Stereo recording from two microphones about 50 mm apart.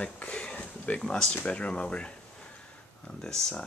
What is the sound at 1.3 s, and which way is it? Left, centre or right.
Speech, left.